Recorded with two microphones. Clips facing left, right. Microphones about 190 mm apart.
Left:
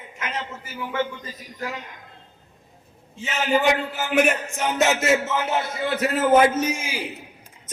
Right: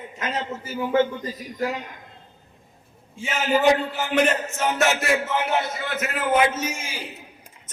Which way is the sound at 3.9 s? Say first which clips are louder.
Left 1 dB; 10° left (ahead or behind).